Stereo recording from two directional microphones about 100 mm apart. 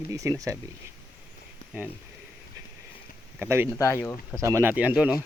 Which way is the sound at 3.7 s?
30° left (ahead or behind).